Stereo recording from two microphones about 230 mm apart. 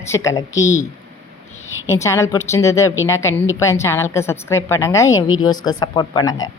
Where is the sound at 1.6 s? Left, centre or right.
Centre.